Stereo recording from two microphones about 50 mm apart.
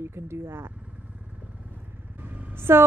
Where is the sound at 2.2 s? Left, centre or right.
Right.